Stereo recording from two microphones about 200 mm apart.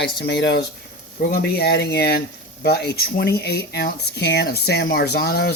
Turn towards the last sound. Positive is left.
turn(degrees=50)  # may be behind; listen again after turning